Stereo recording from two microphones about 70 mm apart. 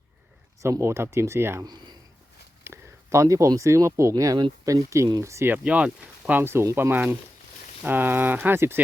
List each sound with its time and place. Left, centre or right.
0.6 s speech: right
1.6 s speech: right
2.6 s speech: right
4.1 s speech: right
5.2 s speech: right
5.6 s speech: centre
6.4 s speech: right